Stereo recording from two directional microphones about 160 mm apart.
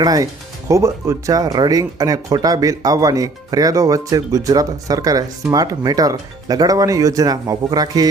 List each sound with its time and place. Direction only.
0.0 s speech: 20° right (ahead or behind)